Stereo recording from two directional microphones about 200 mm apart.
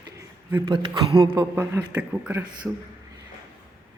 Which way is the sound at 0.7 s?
25° right (ahead or behind).